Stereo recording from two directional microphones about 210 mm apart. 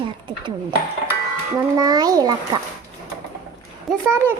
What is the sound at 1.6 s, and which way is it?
A child's voice, 20° right (ahead or behind).